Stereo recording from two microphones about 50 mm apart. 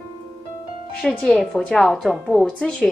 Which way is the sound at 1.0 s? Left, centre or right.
Centre.